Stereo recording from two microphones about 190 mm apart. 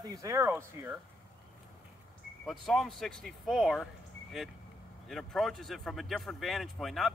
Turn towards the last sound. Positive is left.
turn(degrees=0)  # may be behind; listen again after turning